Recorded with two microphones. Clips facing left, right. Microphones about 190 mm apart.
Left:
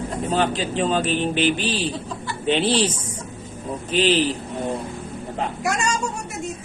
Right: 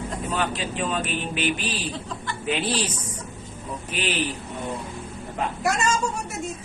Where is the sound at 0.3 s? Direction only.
30° left (ahead or behind).